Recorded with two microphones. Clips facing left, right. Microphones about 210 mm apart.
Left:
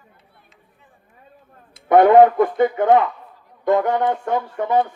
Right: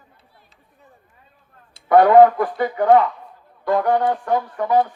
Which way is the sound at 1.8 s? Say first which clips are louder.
Even; 25° left (ahead or behind).